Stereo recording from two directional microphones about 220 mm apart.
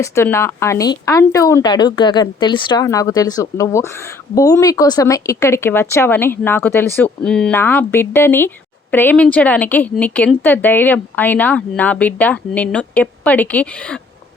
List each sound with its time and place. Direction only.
0.0 s speech: 10° left (ahead or behind)